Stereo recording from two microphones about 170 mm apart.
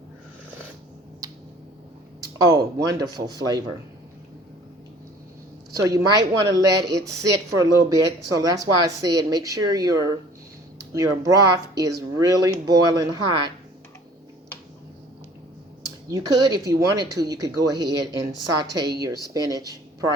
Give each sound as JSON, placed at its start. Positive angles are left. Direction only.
{"t": 1.2, "sound": "a sound", "side_deg": -20}
{"t": 2.7, "sound": "speech", "side_deg": -20}
{"t": 5.7, "sound": "speech", "side_deg": -20}
{"t": 16.0, "sound": "speech", "side_deg": -20}